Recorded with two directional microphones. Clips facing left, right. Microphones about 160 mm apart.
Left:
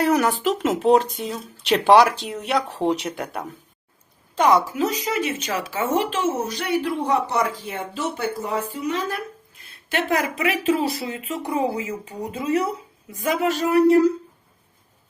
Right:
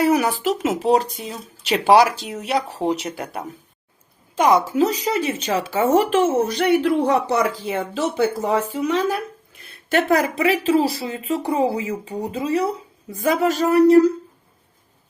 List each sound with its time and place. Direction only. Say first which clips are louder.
0.0 s speech: right 1 dB; 10° right (ahead or behind)
4.4 s a woman's voice: right 1 dB; 15° right (ahead or behind)
4.6 s a woman's voice: right 5 dB; 30° right (ahead or behind); by 9.1 s 90° right
9.9 s speech: right 5 dB; 35° right (ahead or behind)